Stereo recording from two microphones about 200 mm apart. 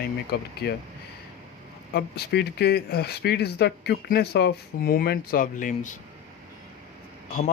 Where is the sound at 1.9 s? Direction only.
55° left (ahead or behind).